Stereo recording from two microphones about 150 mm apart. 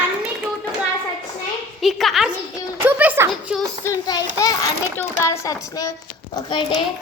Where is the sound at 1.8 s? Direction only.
Centre (ahead or behind).